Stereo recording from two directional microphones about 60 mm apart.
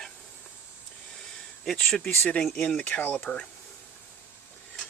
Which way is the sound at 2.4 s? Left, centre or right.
Centre.